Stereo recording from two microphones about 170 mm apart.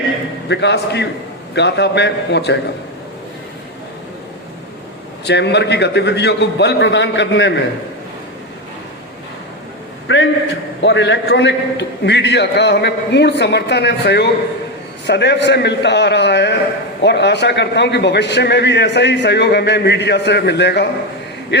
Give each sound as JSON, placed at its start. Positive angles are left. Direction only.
{"t": 0.4, "sound": "a man's voice", "side_deg": 90}
{"t": 5.2, "sound": "a man's voice", "side_deg": 85}
{"t": 10.1, "sound": "a man's voice", "side_deg": 90}